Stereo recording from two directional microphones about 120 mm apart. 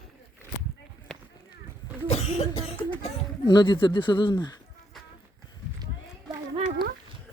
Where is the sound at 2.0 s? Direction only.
60° left (ahead or behind).